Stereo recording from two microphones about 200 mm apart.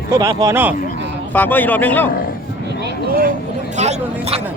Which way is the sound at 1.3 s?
10° left (ahead or behind).